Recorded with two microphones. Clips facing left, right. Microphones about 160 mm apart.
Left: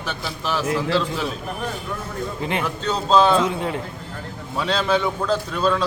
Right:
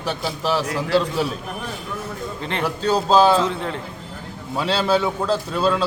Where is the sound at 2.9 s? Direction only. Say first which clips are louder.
Right 2 dB; 35° right (ahead or behind).